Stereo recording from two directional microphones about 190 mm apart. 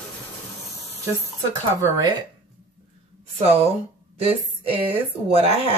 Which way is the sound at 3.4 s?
30° right (ahead or behind).